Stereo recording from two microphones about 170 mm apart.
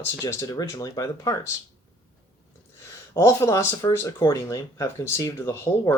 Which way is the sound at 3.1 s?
15° left (ahead or behind).